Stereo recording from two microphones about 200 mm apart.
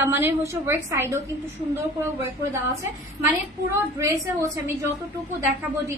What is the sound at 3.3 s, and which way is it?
A woman's voice, 15° right (ahead or behind).